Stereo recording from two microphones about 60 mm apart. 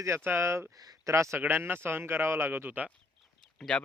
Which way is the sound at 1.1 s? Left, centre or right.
Right.